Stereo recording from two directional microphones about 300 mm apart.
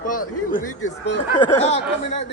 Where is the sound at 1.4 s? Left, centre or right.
Left.